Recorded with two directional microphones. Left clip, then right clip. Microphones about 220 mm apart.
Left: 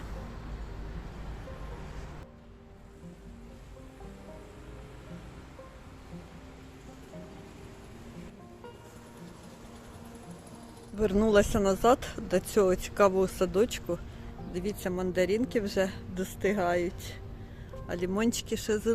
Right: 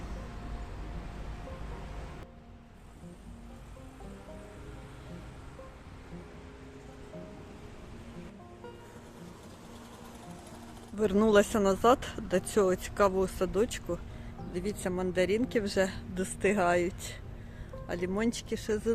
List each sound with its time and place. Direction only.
10.9 s speech: centre (ahead or behind)
17.8 s speech: 5° left (ahead or behind)